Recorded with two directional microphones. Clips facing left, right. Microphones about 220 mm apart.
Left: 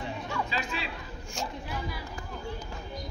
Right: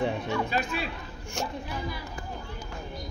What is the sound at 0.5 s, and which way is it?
Chatter, 50° right (ahead or behind).